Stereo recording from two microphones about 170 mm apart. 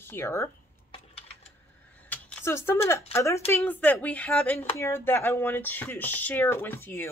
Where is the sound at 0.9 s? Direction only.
35° left (ahead or behind).